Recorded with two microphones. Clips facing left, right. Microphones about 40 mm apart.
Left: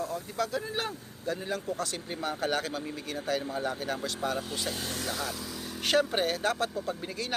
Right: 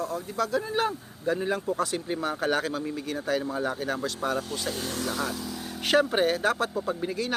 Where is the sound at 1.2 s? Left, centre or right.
Right.